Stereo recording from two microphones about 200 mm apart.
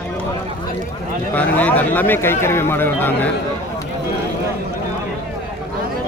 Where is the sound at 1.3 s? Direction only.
10° left (ahead or behind).